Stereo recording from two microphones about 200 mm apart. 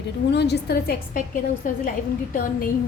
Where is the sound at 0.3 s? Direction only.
55° left (ahead or behind).